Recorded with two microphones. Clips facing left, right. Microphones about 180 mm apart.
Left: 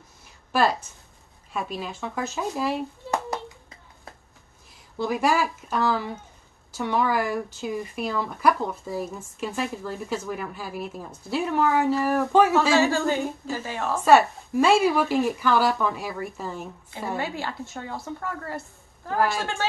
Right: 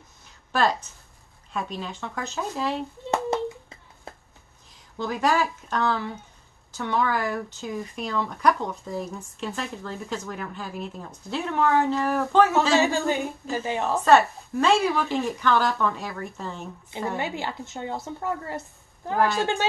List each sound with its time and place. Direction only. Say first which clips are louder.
0.5 s a woman's voice: left 1 dB; 10° left (ahead or behind)
4.9 s speech: left 1 dB; 10° left (ahead or behind)
12.7 s a woman's voice: left 1 dB; 20° right (ahead or behind)
13.9 s speech: left 1 dB; 10° left (ahead or behind)
17.2 s a woman's voice: even; 20° right (ahead or behind)